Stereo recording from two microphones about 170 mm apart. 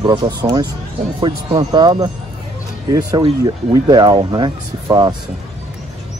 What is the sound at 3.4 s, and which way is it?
Speech, 25° right (ahead or behind).